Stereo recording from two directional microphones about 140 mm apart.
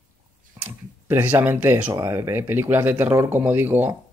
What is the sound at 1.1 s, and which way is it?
Speech, 15° right (ahead or behind).